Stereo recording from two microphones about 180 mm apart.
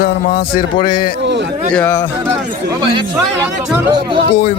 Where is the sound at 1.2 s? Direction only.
75° right (ahead or behind).